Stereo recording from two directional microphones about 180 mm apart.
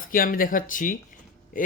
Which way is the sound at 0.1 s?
50° left (ahead or behind).